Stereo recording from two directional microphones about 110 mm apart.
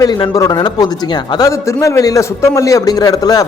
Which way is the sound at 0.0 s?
35° left (ahead or behind).